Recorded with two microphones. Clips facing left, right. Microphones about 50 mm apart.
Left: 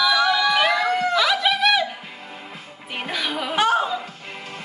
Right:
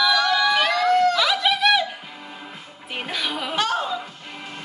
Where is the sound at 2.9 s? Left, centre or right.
Centre.